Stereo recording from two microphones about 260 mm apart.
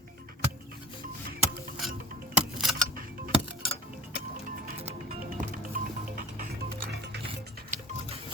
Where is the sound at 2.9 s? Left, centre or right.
Right.